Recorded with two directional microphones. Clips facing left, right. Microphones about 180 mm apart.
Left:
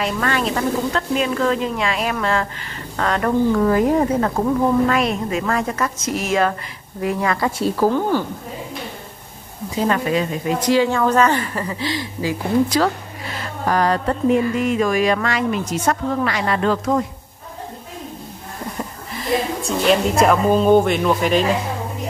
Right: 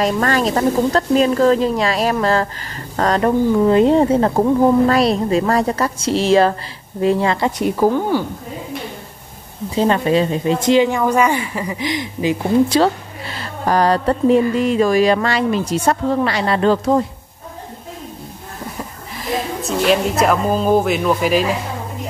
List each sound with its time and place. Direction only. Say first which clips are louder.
0.0 s a woman's voice: right 4 dB; 40° right (ahead or behind)
3.2 s a woman's voice: right 2 dB; 20° right (ahead or behind)
9.8 s a woman's voice: right 4 dB; 25° right (ahead or behind)
18.8 s a woman's voice: left 1 dB; centre (ahead or behind)